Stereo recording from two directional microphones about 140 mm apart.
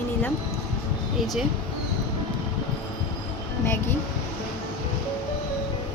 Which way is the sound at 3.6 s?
20° left (ahead or behind).